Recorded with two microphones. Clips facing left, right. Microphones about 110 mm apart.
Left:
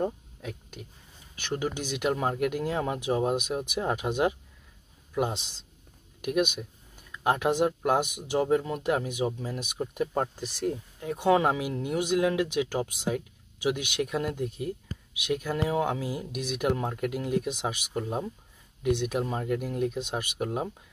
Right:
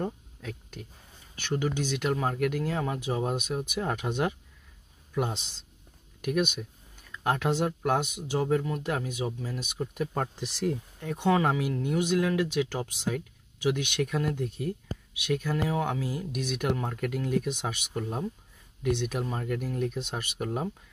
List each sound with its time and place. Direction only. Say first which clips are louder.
0.0 s a sound: left 3 dB; 10° left (ahead or behind)
1.4 s speech: right 2 dB; 10° left (ahead or behind)
7.2 s speech: left 3 dB; 15° left (ahead or behind)
11.0 s speech: left 2 dB; 5° left (ahead or behind)
11.2 s speech: left 2 dB; 15° left (ahead or behind)
14.9 s a sound: right 3 dB; 45° right (ahead or behind)
15.2 s speech: even; 10° left (ahead or behind)
15.5 s speech: left 4 dB; 25° left (ahead or behind)